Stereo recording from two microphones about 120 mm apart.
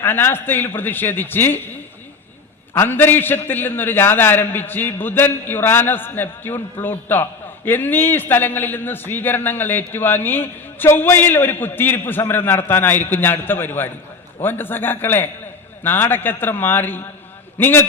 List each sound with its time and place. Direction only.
0.0 s a man's voice: 20° left (ahead or behind)
2.7 s a man's voice: 20° left (ahead or behind)